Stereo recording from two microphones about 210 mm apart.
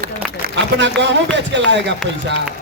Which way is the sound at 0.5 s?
55° right (ahead or behind).